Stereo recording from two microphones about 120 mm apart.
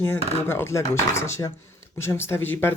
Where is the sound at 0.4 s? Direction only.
20° left (ahead or behind).